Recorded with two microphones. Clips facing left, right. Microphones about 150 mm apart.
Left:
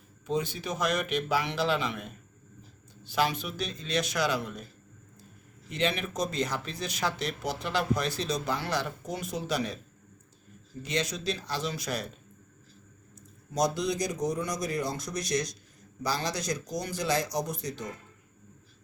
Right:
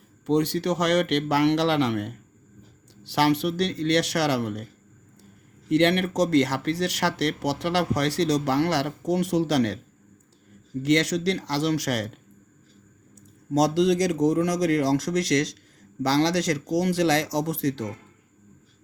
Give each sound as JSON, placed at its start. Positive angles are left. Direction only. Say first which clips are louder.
{"t": 0.3, "sound": "speech", "louder": "right 9 dB", "side_deg": -75}
{"t": 5.6, "sound": "speech", "louder": "right 10 dB", "side_deg": -75}
{"t": 10.8, "sound": "speech", "louder": "right 10 dB", "side_deg": -85}
{"t": 13.5, "sound": "speech", "louder": "right 8 dB", "side_deg": -90}